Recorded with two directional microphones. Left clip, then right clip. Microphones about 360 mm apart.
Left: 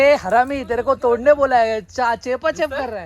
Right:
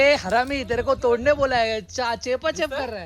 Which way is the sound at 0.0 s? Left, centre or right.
Centre.